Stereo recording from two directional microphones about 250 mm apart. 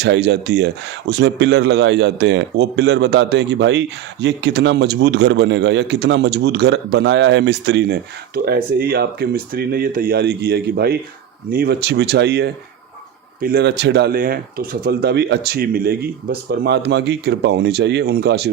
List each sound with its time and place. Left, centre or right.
0.0 s speech: right